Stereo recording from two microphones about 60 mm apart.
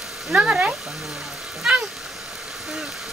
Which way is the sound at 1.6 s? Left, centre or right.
Centre.